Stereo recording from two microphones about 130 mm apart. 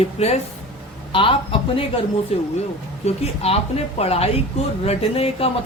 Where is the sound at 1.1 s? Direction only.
45° left (ahead or behind).